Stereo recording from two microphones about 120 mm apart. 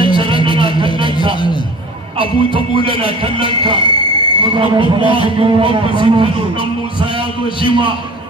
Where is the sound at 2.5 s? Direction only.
45° left (ahead or behind).